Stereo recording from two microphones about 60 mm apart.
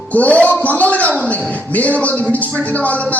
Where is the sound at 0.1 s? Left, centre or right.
Left.